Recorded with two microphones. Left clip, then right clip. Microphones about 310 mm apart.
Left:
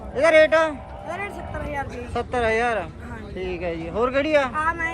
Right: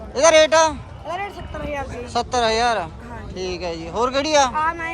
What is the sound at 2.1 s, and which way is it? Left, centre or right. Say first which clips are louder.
Speech: right 3 dB; centre.